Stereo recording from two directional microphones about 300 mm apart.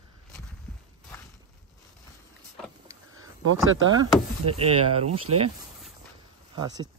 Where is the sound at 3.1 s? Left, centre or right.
Right.